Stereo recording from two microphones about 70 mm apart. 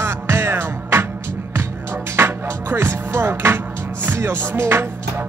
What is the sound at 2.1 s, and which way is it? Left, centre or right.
Music, right.